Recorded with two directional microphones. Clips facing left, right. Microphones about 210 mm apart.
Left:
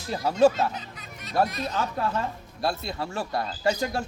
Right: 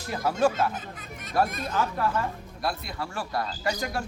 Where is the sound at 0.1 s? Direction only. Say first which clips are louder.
Left 4 dB; 25° left (ahead or behind).